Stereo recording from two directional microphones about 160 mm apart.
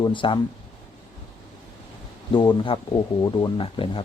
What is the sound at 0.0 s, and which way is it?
Speech, 30° left (ahead or behind).